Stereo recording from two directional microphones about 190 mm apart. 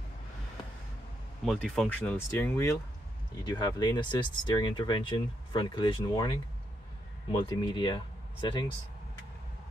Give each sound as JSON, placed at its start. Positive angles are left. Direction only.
{"t": 1.4, "sound": "speech", "side_deg": 0}
{"t": 7.2, "sound": "speech", "side_deg": 25}